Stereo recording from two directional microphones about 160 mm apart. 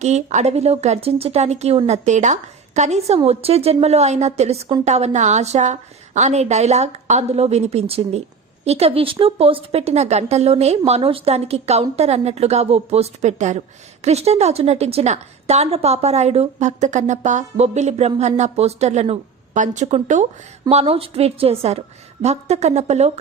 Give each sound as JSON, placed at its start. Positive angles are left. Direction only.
{"t": 0.0, "sound": "a woman's voice", "side_deg": -45}